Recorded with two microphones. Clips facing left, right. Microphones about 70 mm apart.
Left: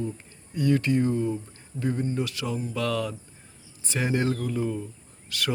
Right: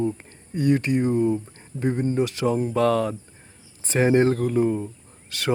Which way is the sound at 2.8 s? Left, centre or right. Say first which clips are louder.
Right 7 dB; right.